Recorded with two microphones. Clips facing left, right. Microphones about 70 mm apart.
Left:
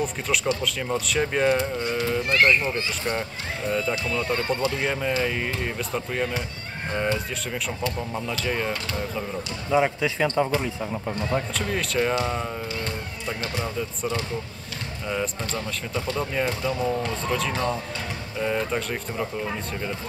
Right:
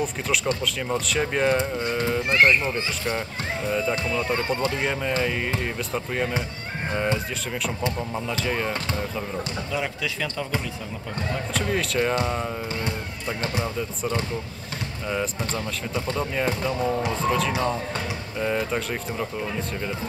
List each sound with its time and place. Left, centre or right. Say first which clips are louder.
0.7 s speech: even; centre
2.2 s speech: right 1 dB; right
3.1 s speech: right 1 dB; centre
4.8 s speech: even; centre
6.9 s speech: even; centre
8.3 s speech: even; centre
9.7 s speech: left 10 dB; left
11.5 s speech: right 1 dB; centre
15.0 s speech: right 1 dB; centre